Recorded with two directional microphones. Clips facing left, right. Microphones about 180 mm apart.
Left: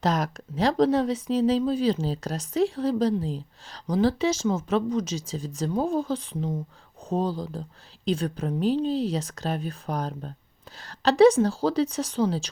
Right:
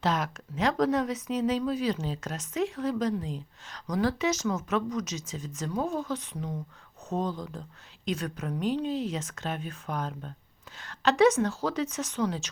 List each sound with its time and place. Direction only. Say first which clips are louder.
0.0 s speech: left 3 dB; 40° left (ahead or behind)